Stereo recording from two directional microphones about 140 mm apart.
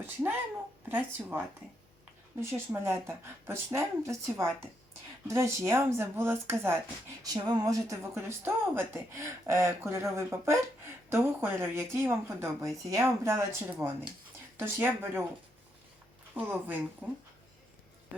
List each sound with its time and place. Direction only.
0.0 s speech: 15° right (ahead or behind)
2.4 s speech: 20° right (ahead or behind)
16.3 s speech: 15° right (ahead or behind)
17.0 s speech: centre (ahead or behind)